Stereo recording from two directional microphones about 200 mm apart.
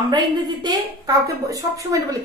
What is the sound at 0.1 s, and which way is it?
A woman's voice, 20° right (ahead or behind).